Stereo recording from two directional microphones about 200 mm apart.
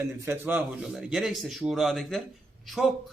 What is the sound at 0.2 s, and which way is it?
A man's voice, 10° right (ahead or behind).